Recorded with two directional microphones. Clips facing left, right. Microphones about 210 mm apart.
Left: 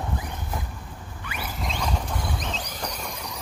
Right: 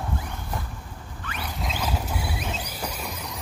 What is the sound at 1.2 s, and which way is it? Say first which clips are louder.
Rodents: even; 10° left (ahead or behind).